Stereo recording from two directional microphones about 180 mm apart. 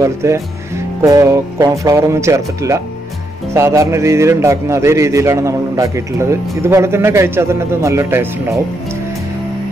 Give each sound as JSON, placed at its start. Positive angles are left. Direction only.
{"t": 0.0, "sound": "a man's voice", "side_deg": -15}